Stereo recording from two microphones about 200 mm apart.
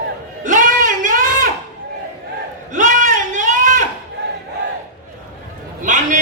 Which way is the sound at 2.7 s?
40° right (ahead or behind).